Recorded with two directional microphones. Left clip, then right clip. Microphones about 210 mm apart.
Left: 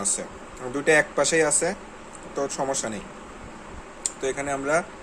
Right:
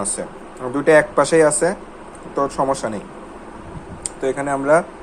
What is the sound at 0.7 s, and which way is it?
Speech, 10° right (ahead or behind).